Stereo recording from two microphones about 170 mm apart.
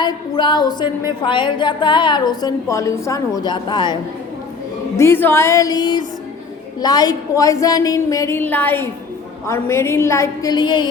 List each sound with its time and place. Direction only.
0.0 s a woman's voice: 25° left (ahead or behind)
4.9 s a woman's voice: 15° left (ahead or behind)